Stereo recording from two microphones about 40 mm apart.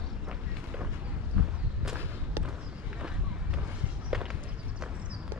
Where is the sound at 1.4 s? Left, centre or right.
Right.